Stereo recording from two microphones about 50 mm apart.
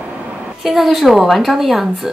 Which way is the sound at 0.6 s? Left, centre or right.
Centre.